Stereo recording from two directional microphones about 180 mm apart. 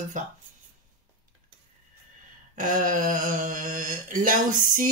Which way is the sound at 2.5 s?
50° right (ahead or behind).